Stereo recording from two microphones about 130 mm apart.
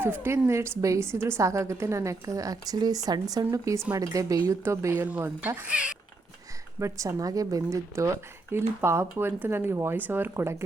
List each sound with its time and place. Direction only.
0.0 s a woman's voice: 15° right (ahead or behind)
5.0 s speech: 10° right (ahead or behind)
6.7 s a woman's voice: 25° right (ahead or behind)